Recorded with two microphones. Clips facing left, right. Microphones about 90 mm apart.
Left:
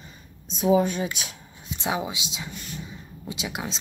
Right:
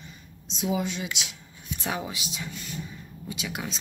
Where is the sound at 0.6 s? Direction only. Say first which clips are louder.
Left 8 dB; 45° left (ahead or behind).